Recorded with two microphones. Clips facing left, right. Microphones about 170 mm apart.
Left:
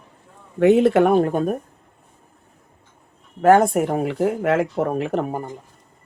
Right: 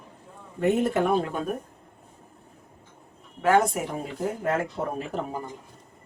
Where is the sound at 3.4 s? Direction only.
50° left (ahead or behind).